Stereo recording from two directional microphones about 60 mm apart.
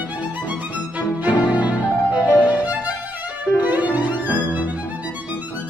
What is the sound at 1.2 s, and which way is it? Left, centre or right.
Music, right.